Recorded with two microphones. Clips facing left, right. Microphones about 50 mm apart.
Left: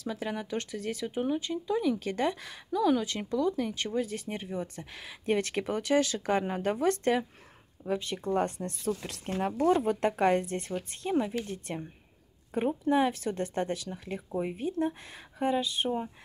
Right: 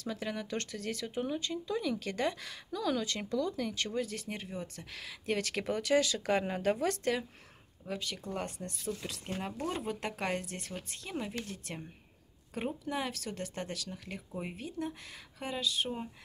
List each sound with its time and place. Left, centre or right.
0.0 s speech: centre; by 11.7 s left
12.8 s speech: left